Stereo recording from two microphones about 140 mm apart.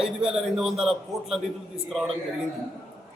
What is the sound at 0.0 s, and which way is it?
A man's voice, 5° right (ahead or behind).